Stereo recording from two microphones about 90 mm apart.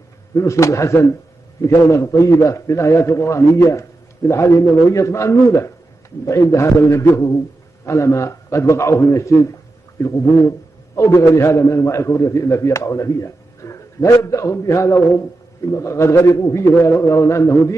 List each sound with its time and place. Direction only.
0.3 s a man's voice: 35° left (ahead or behind)